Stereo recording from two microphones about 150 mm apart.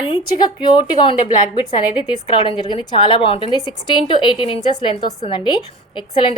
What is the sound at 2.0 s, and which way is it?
A woman's voice, 35° left (ahead or behind).